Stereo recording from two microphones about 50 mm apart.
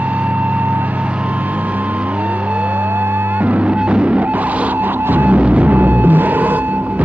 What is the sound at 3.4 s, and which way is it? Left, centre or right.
Music, right.